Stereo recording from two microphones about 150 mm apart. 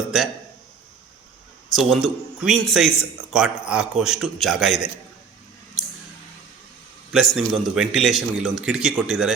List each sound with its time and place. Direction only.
0.1 s a man's voice: 5° right (ahead or behind)
1.7 s a man's voice: centre (ahead or behind)
5.8 s a sound: centre (ahead or behind)
7.3 s a man's voice: 5° right (ahead or behind)